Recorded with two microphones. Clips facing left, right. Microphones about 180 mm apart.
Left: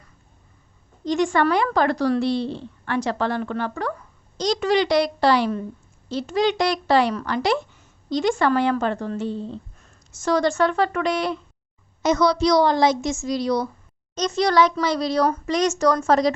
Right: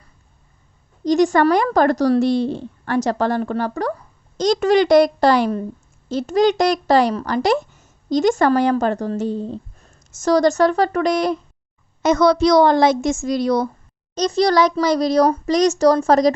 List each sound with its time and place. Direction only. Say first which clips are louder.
1.0 s a child's voice: right 5 dB; 40° right (ahead or behind)
4.4 s a woman's voice: right 5 dB; 50° right (ahead or behind)
12.0 s a woman's voice: right 4 dB; 50° right (ahead or behind)
14.2 s a child's voice: right 3 dB; 35° right (ahead or behind)